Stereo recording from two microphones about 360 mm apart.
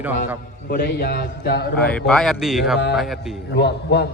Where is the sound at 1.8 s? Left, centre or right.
Centre.